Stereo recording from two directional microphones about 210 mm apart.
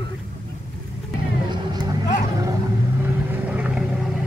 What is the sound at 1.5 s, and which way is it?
Vehicle, 20° right (ahead or behind).